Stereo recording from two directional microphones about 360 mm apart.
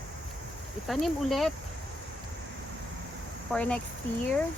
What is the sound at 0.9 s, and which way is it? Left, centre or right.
Speech, centre.